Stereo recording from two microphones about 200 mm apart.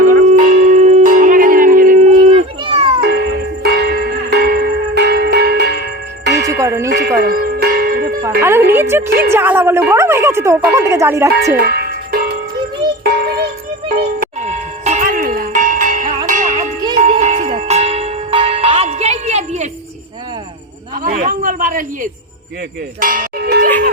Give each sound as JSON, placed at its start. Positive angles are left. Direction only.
{"t": 0.2, "sound": "church bell", "side_deg": -40}
{"t": 3.0, "sound": "music", "side_deg": -55}
{"t": 6.6, "sound": "music", "side_deg": -15}
{"t": 7.2, "sound": "bell", "side_deg": -50}
{"t": 8.4, "sound": "music", "side_deg": -10}
{"t": 8.7, "sound": "a sound", "side_deg": -10}
{"t": 10.7, "sound": "speech", "side_deg": -15}
{"t": 11.5, "sound": "music", "side_deg": -50}
{"t": 13.9, "sound": "music", "side_deg": -40}
{"t": 21.0, "sound": "a sound", "side_deg": -40}